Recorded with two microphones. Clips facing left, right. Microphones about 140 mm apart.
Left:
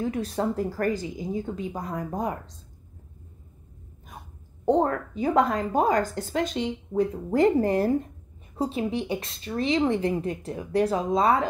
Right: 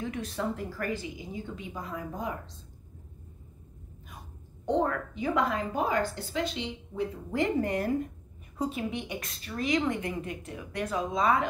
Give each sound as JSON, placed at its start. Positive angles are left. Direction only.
{"t": 0.0, "sound": "speech", "side_deg": 35}
{"t": 4.6, "sound": "a woman's voice", "side_deg": 40}